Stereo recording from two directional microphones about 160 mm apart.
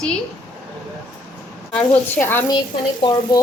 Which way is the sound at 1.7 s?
10° left (ahead or behind).